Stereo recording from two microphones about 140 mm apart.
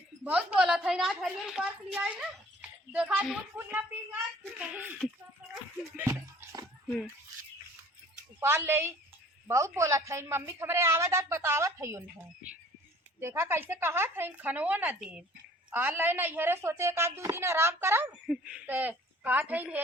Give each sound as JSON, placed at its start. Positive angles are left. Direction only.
{"t": 0.3, "sound": "a woman's voice", "side_deg": -5}
{"t": 2.6, "sound": "a sound", "side_deg": -10}
{"t": 3.5, "sound": "a woman's voice", "side_deg": -15}
{"t": 6.0, "sound": "bathtub", "side_deg": -20}
{"t": 8.4, "sound": "a woman's voice", "side_deg": -15}
{"t": 13.1, "sound": "a woman's voice", "side_deg": -15}
{"t": 18.3, "sound": "a woman's voice", "side_deg": -5}